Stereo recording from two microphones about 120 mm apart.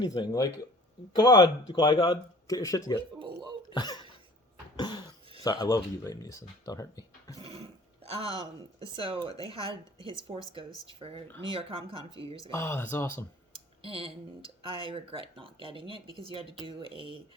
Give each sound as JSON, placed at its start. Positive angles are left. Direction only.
{"t": 0.0, "sound": "speech", "side_deg": 35}
{"t": 3.2, "sound": "speech", "side_deg": -40}
{"t": 3.7, "sound": "speech", "side_deg": 35}
{"t": 4.8, "sound": "cough", "side_deg": 35}
{"t": 5.4, "sound": "speech", "side_deg": 30}
{"t": 7.4, "sound": "speech", "side_deg": -55}
{"t": 12.5, "sound": "speech", "side_deg": 20}
{"t": 13.8, "sound": "speech", "side_deg": -50}